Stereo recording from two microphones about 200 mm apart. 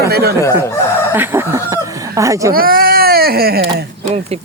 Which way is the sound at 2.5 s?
45° right (ahead or behind).